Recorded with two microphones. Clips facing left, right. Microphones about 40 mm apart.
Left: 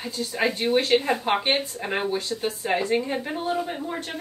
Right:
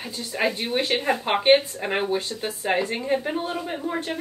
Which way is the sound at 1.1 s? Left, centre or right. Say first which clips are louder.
Right 5 dB; centre.